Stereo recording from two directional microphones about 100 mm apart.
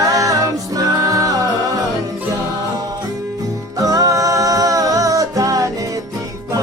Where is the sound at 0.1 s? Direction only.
35° right (ahead or behind).